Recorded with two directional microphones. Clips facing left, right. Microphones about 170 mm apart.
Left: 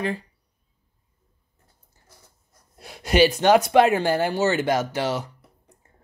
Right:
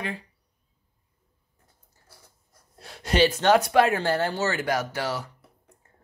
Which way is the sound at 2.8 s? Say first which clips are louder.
Left 3 dB; 10° left (ahead or behind).